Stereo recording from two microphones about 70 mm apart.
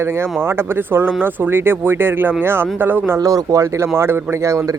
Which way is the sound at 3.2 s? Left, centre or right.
Right.